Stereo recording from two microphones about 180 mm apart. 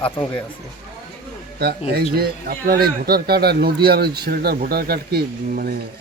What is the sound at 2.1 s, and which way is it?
A man's voice, 55° right (ahead or behind).